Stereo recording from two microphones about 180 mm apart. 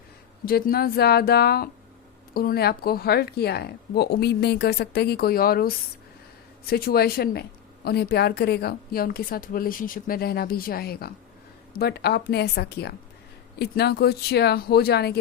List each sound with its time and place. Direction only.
0.4 s a woman's voice: 55° left (ahead or behind)